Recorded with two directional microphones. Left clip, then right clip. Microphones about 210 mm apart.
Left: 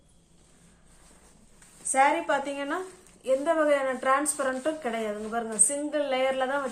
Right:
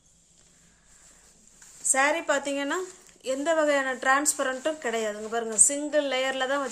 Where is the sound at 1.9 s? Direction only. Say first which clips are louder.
Left 1 dB; 55° right (ahead or behind).